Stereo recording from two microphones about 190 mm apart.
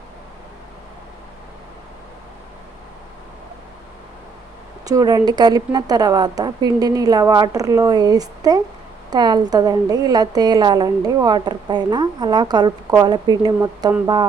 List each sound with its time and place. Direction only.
4.9 s a woman's voice: 20° right (ahead or behind)